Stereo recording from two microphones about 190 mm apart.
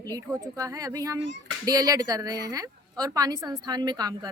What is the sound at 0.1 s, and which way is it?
Speech, 20° right (ahead or behind).